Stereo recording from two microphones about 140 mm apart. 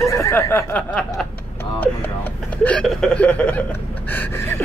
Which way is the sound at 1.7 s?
15° left (ahead or behind).